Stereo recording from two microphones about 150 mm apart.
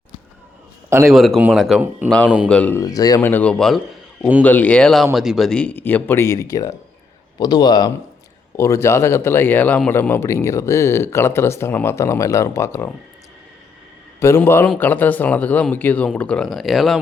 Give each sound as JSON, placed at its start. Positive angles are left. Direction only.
{"t": 0.9, "sound": "a man's voice", "side_deg": -20}
{"t": 1.1, "sound": "a man's voice", "side_deg": 0}
{"t": 2.8, "sound": "speech", "side_deg": 25}
{"t": 3.2, "sound": "a man's voice", "side_deg": 10}
{"t": 4.2, "sound": "a man's voice", "side_deg": -10}
{"t": 4.4, "sound": "a man's voice", "side_deg": 10}
{"t": 14.2, "sound": "a man's voice", "side_deg": 15}